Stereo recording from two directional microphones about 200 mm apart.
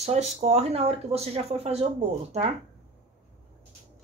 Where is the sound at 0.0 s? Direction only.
35° right (ahead or behind).